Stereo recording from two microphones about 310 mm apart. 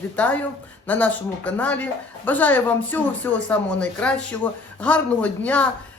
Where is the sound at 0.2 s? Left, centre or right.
Centre.